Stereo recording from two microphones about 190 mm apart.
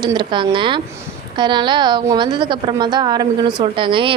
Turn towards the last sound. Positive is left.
turn(degrees=-25)  # may be behind; listen again after turning